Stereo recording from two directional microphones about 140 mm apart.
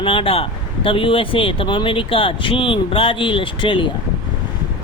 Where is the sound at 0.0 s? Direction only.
40° left (ahead or behind).